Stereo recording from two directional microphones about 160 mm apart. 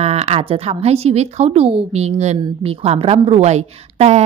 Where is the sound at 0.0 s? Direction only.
40° right (ahead or behind).